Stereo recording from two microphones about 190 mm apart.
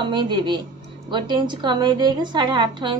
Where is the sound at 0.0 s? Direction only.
25° right (ahead or behind).